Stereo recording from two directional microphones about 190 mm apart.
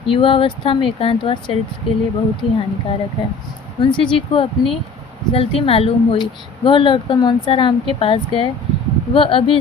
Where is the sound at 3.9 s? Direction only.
25° left (ahead or behind).